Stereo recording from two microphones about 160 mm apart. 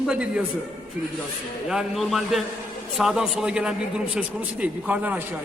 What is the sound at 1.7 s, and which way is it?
A man's voice, centre (ahead or behind).